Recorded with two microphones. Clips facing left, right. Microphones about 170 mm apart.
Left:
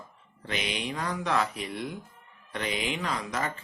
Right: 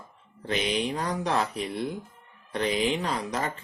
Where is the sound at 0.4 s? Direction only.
35° right (ahead or behind).